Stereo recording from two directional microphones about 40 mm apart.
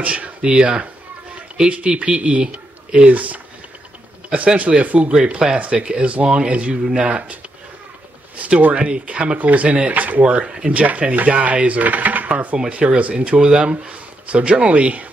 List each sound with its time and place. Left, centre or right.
0.0 s speech: right
3.1 s speech: right
5.1 s speech: right
8.4 s speech: right
9.4 s speech: right
10.8 s speech: right
12.5 s speech: right